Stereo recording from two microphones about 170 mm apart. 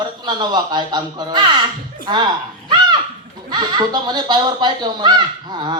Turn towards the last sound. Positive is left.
turn(degrees=-25)  # may be behind; listen again after turning